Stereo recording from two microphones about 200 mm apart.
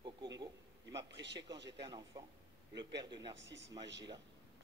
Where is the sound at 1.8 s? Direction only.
20° right (ahead or behind).